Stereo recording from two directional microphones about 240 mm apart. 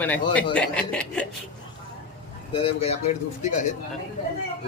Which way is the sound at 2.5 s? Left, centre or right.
Left.